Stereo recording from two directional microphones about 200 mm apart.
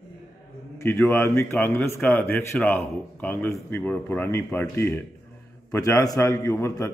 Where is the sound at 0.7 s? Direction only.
15° left (ahead or behind).